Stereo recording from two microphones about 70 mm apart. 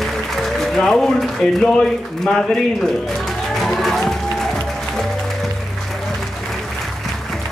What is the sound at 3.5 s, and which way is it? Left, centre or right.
Music, centre.